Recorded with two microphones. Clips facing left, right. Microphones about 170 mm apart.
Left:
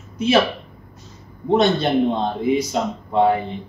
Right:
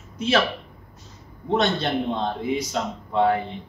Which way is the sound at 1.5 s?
10° left (ahead or behind).